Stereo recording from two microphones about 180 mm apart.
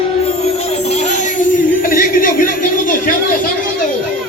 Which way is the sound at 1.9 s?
50° left (ahead or behind).